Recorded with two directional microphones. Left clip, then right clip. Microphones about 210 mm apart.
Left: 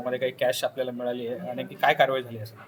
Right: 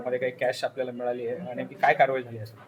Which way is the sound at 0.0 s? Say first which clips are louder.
Left 1 dB; 20° left (ahead or behind).